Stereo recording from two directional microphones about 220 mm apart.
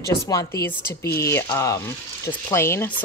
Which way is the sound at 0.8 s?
45° left (ahead or behind).